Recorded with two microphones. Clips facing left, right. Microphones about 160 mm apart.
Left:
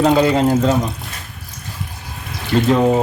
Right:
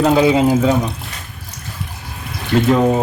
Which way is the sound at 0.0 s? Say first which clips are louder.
Right 1 dB; 5° right (ahead or behind).